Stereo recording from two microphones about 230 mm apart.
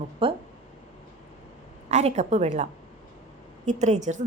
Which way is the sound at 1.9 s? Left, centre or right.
Right.